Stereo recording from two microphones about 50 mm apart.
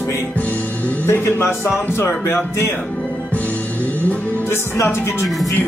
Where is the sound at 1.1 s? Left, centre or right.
Left.